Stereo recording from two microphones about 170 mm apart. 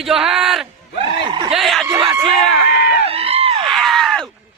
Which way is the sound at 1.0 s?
30° right (ahead or behind).